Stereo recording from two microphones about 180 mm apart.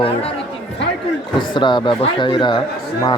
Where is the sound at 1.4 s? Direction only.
25° left (ahead or behind).